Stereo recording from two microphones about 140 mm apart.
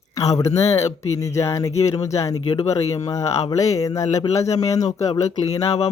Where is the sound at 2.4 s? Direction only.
45° left (ahead or behind).